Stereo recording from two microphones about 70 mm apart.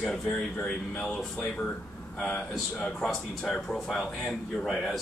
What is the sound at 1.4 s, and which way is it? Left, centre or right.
Speech, centre.